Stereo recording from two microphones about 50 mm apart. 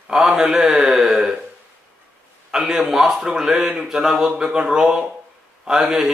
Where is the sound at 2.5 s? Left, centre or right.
Centre.